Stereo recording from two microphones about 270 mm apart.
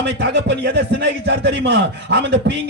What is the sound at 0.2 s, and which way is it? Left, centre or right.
A man's voice, right.